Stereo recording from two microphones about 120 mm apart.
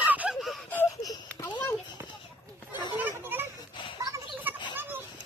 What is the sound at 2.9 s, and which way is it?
Children playing, 15° right (ahead or behind).